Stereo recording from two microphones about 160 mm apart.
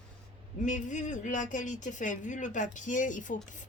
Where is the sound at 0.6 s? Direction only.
50° left (ahead or behind).